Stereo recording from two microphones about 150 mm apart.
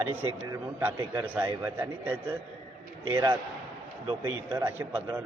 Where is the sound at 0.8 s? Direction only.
15° right (ahead or behind).